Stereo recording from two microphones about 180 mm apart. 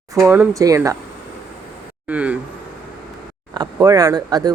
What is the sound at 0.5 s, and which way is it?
Speech, 20° right (ahead or behind).